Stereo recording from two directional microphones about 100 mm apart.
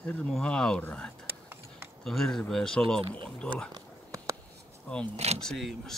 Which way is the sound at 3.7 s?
35° right (ahead or behind).